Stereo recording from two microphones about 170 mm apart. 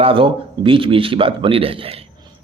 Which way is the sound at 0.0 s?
30° right (ahead or behind).